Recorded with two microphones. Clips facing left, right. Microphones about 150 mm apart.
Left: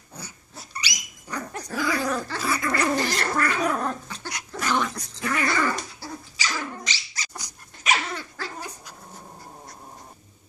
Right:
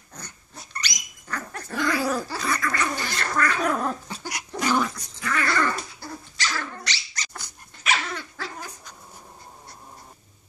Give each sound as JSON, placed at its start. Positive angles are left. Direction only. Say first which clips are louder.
{"t": 0.1, "sound": "dog", "louder": "left 1 dB", "side_deg": 10}
{"t": 1.7, "sound": "dog", "louder": "right 1 dB", "side_deg": 0}
{"t": 2.3, "sound": "gargling", "louder": "left 1 dB", "side_deg": 5}
{"t": 2.6, "sound": "gargling", "louder": "left 4 dB", "side_deg": 35}
{"t": 3.6, "sound": "gargling", "louder": "even", "side_deg": -5}
{"t": 4.2, "sound": "dog", "louder": "right 3 dB", "side_deg": -15}
{"t": 5.2, "sound": "dog", "louder": "left 1 dB", "side_deg": 20}
{"t": 5.5, "sound": "dog", "louder": "even", "side_deg": 5}